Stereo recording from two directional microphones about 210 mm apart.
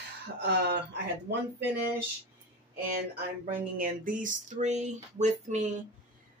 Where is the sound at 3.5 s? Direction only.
40° right (ahead or behind).